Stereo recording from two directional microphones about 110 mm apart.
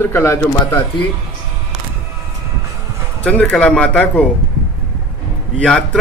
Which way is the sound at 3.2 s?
10° left (ahead or behind).